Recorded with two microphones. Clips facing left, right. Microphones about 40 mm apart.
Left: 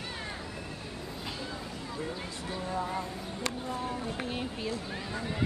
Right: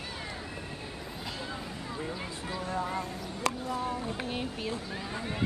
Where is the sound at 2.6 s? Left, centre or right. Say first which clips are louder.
Even; centre.